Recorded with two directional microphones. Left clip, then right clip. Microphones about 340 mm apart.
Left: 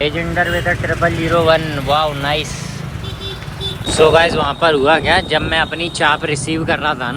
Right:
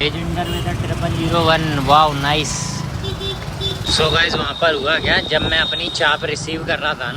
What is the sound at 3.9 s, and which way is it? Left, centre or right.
Speech, centre.